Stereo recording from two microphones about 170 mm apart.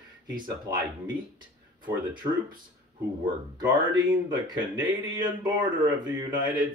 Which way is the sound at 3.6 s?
25° right (ahead or behind).